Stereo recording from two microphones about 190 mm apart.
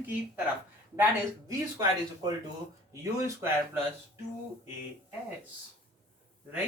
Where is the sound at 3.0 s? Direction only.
15° right (ahead or behind).